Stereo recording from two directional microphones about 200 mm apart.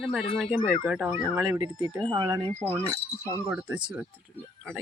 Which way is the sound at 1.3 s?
20° right (ahead or behind).